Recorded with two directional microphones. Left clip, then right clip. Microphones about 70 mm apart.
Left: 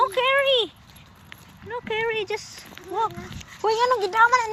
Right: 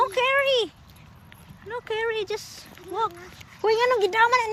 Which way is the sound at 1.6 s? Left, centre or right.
Right.